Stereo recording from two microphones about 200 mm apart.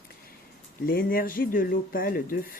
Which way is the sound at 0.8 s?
45° left (ahead or behind).